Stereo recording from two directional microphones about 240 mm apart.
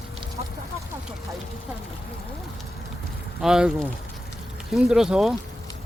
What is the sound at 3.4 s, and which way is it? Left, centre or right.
Speech, centre.